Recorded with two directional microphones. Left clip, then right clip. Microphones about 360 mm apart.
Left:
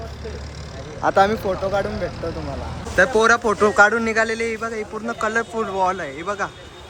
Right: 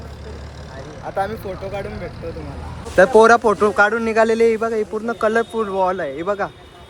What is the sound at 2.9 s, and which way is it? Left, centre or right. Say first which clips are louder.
A man's voice: right 5 dB; centre.